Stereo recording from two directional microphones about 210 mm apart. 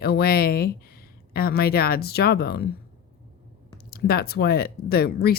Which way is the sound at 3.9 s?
45° left (ahead or behind).